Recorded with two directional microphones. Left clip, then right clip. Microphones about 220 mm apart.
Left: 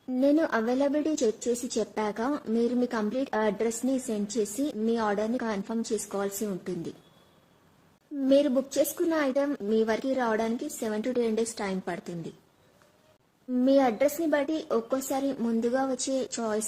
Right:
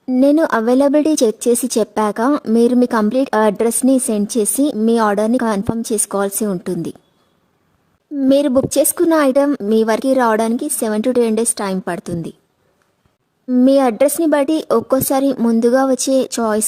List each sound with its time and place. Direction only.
0.1 s a woman's voice: 50° right (ahead or behind)
8.2 s a woman's voice: 50° right (ahead or behind)
13.5 s a woman's voice: 50° right (ahead or behind)